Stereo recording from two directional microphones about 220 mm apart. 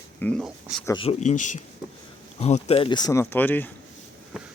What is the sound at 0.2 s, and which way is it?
Speech, 5° left (ahead or behind).